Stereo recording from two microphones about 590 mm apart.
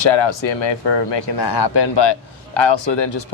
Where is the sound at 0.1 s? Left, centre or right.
Left.